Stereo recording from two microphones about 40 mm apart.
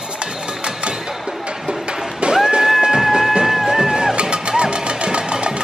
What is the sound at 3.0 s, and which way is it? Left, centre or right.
Music, centre.